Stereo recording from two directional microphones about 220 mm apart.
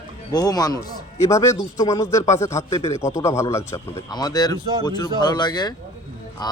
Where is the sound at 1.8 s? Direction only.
20° left (ahead or behind).